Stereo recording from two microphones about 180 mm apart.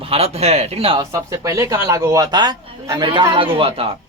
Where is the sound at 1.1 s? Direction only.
20° right (ahead or behind).